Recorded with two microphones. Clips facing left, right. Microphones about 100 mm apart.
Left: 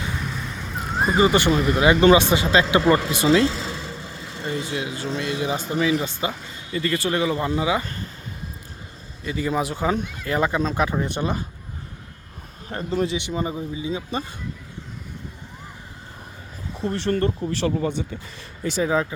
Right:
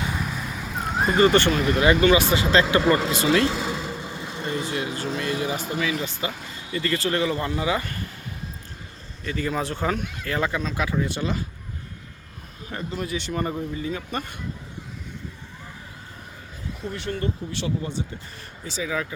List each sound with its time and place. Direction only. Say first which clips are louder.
0.2 s vehicle: right 1 dB; 5° right (ahead or behind); by 1.6 s 10° left (ahead or behind)
1.8 s speech: left 3 dB; 20° left (ahead or behind)
3.4 s vehicle: even; 20° right (ahead or behind)
4.4 s speech: left 1 dB; 20° left (ahead or behind)
9.2 s speech: left 3 dB; 15° left (ahead or behind)
12.6 s speech: left 6 dB; 35° left (ahead or behind)
13.1 s speech: left 1 dB; 15° left (ahead or behind)
16.7 s speech: left 8 dB; 35° left (ahead or behind)
17.1 s speech: left 6 dB; 50° left (ahead or behind)